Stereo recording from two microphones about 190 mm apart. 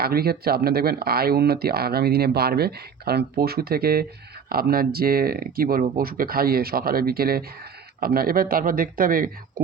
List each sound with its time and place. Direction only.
0.0 s speech: 55° right (ahead or behind)